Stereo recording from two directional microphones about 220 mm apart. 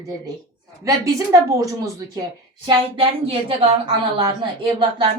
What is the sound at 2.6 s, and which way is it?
A woman's voice, 25° right (ahead or behind).